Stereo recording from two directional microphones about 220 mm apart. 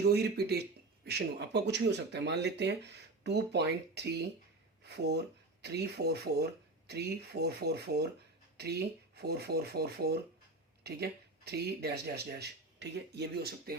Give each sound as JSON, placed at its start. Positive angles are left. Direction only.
{"t": 0.0, "sound": "speech", "side_deg": -45}